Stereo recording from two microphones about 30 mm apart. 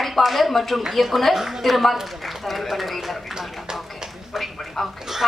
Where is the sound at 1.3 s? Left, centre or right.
Centre.